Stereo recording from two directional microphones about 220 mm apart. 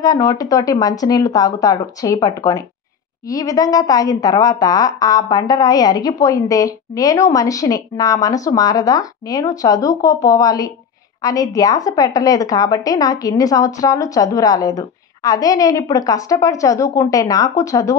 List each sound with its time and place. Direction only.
0.0 s a woman's voice: 15° left (ahead or behind)